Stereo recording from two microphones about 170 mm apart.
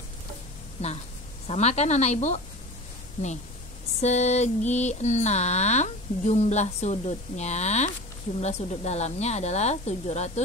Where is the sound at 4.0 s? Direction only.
40° left (ahead or behind).